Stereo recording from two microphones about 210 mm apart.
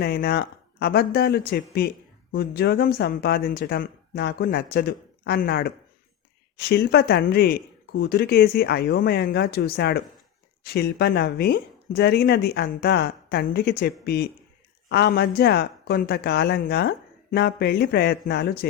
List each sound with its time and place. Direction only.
0.0 s speech: 50° left (ahead or behind)